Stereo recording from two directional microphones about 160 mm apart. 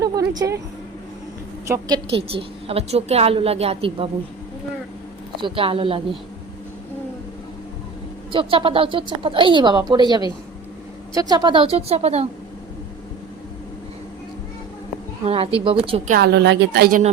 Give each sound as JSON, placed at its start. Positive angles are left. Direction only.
{"t": 0.3, "sound": "speech", "side_deg": -20}
{"t": 1.6, "sound": "a woman's voice", "side_deg": -15}
{"t": 2.0, "sound": "a woman's voice", "side_deg": -35}
{"t": 5.4, "sound": "a woman's voice", "side_deg": -30}
{"t": 8.3, "sound": "a woman's voice", "side_deg": -35}
{"t": 15.2, "sound": "a woman's voice", "side_deg": -40}
{"t": 16.0, "sound": "a woman's voice", "side_deg": -75}